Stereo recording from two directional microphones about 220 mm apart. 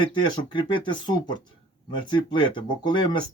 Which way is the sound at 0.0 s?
20° left (ahead or behind).